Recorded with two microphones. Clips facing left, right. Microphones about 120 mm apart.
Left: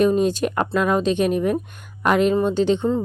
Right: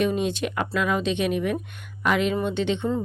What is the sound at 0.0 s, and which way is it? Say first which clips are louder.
Speech: left 6 dB; 40° left (ahead or behind).